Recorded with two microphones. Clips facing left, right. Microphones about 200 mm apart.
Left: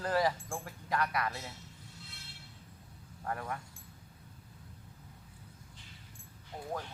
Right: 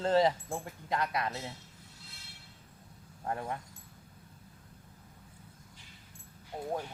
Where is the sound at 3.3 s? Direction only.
25° right (ahead or behind).